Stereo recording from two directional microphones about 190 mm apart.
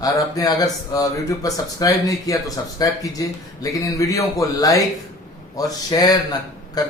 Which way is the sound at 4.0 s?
15° left (ahead or behind).